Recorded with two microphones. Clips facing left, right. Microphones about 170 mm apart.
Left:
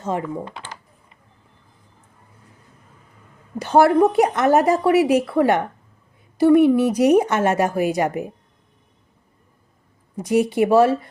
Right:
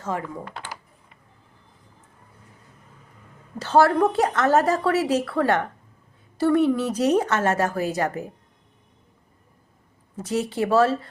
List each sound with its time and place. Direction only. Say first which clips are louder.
0.0 s speech: left 5 dB; 20° left (ahead or behind)
3.6 s a woman's voice: left 4 dB; 15° left (ahead or behind)
10.2 s a woman's voice: left 7 dB; 15° left (ahead or behind)